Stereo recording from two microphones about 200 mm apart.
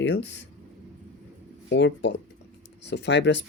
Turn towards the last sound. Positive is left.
turn(degrees=60)  # may be behind; listen again after turning